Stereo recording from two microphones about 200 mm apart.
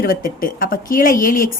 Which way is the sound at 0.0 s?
45° left (ahead or behind).